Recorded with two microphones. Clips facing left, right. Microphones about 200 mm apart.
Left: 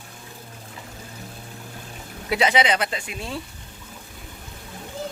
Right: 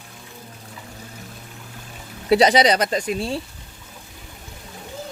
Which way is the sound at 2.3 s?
35° right (ahead or behind).